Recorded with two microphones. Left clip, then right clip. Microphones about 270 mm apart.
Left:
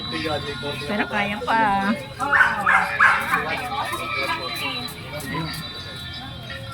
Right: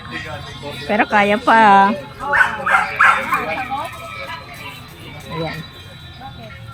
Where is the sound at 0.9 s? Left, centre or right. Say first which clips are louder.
Right 11 dB; centre.